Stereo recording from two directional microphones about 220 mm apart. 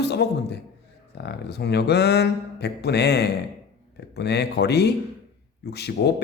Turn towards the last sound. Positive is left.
turn(degrees=50)  # may be behind; listen again after turning